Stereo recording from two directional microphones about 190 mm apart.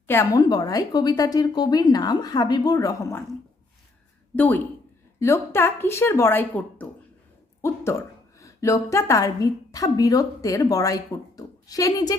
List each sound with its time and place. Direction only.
0.1 s a woman's voice: 15° left (ahead or behind)
4.4 s a woman's voice: 10° left (ahead or behind)